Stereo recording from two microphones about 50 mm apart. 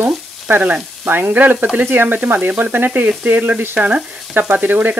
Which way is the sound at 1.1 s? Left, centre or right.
Right.